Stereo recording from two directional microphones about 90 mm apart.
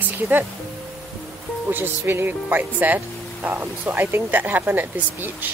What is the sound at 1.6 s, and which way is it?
Speech, 25° right (ahead or behind).